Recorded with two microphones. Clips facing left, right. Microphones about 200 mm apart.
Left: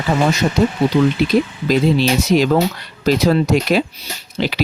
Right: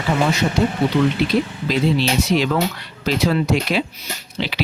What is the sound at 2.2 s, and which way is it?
Speech, 40° left (ahead or behind).